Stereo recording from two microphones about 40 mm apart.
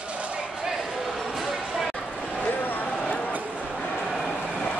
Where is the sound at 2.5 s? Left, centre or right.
Left.